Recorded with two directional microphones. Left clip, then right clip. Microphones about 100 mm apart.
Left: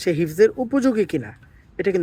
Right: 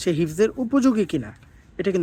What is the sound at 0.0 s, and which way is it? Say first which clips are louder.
Speech: left 4 dB; 20° right (ahead or behind).